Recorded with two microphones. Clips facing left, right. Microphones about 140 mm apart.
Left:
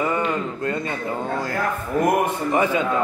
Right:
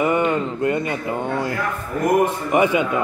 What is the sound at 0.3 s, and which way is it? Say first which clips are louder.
Speech: right 4 dB; 20° right (ahead or behind).